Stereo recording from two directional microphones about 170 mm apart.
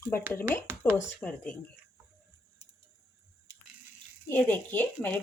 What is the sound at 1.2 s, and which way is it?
Speech, 10° left (ahead or behind).